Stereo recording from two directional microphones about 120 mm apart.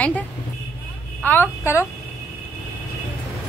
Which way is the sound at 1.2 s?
15° left (ahead or behind).